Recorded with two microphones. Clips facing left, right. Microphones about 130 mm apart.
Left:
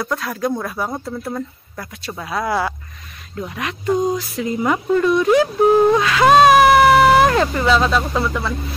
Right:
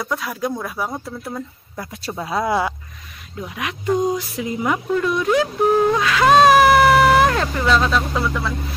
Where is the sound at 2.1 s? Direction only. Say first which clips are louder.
Right 1 dB; 20° right (ahead or behind).